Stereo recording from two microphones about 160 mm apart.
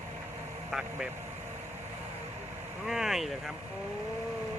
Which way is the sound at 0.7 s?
5° right (ahead or behind).